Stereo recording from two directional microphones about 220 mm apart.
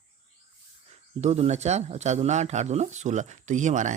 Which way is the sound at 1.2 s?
30° right (ahead or behind).